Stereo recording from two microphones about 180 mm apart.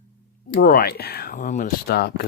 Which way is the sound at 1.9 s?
60° left (ahead or behind).